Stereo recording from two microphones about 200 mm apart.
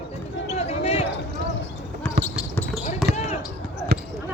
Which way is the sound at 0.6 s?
30° left (ahead or behind).